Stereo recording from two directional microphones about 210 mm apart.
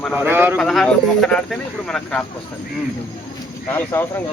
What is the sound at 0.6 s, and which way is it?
Speech, centre (ahead or behind).